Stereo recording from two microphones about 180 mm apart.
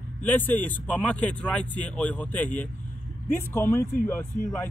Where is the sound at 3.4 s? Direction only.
15° left (ahead or behind).